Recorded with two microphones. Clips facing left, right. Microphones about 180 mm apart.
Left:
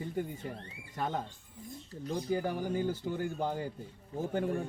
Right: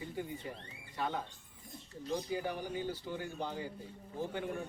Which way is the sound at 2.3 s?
45° left (ahead or behind).